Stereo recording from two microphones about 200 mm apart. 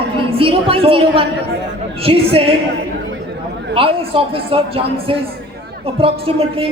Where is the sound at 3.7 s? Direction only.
25° right (ahead or behind).